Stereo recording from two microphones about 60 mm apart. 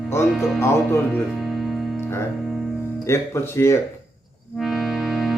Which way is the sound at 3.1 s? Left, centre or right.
Left.